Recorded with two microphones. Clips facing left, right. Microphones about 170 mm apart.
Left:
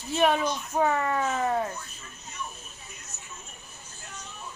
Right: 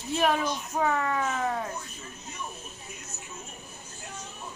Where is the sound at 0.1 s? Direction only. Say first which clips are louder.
Left 2 dB; centre (ahead or behind).